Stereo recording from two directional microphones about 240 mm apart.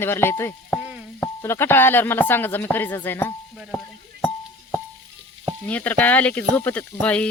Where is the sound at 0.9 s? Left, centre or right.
Centre.